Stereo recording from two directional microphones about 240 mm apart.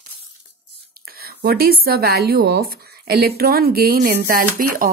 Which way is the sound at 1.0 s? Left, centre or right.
Right.